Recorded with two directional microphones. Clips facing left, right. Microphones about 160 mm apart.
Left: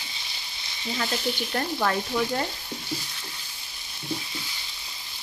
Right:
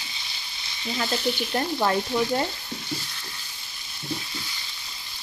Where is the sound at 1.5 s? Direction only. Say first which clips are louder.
Right 2 dB; 20° right (ahead or behind).